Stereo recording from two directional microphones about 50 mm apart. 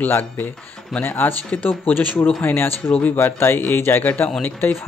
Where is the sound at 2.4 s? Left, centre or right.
Left.